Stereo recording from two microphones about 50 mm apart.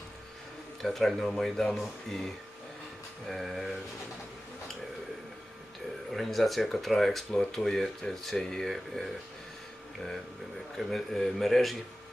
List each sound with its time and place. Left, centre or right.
0.8 s speech: centre
6.1 s speech: centre
10.8 s speech: centre